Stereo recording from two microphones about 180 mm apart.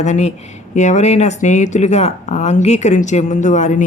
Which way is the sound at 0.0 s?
40° left (ahead or behind).